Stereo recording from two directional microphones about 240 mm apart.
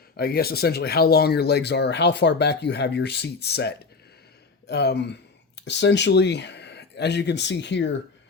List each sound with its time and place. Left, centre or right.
0.2 s speech: left